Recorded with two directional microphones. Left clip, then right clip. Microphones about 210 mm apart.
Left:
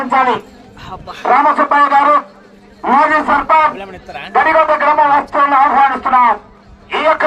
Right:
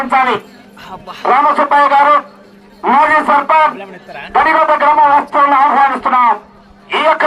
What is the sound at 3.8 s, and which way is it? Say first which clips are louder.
Speech: left 1 dB; 45° left (ahead or behind).